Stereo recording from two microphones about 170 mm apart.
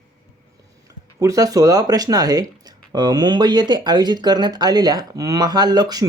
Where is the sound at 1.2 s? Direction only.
20° right (ahead or behind).